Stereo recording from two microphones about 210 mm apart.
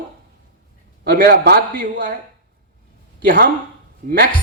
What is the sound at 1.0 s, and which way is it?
A man's voice, 45° right (ahead or behind).